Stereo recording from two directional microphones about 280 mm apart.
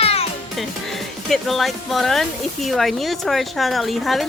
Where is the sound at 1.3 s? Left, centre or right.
Centre.